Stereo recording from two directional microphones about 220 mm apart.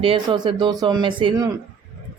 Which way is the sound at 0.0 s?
25° right (ahead or behind).